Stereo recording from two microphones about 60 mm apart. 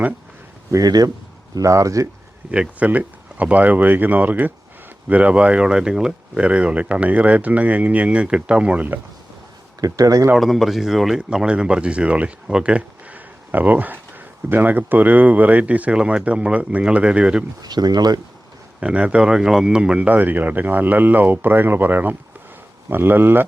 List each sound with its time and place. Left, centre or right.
0.7 s speech: right
1.5 s speech: right
2.5 s speech: right
9.8 s speech: right
10.3 s speech: centre
11.3 s speech: centre
17.6 s speech: right
18.8 s speech: centre
20.1 s speech: right